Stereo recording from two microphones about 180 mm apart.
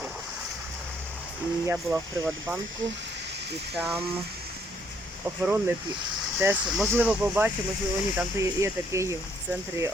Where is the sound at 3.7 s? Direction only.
5° right (ahead or behind).